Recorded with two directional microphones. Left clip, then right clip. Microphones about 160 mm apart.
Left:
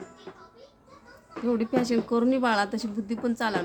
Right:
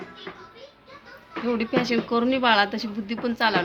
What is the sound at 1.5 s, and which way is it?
Speech, 60° left (ahead or behind).